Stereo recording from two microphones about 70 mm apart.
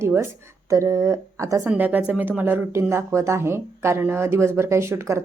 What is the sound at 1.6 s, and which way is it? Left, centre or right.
Speech, right.